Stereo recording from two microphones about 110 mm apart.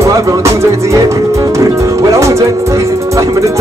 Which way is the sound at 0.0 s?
30° right (ahead or behind).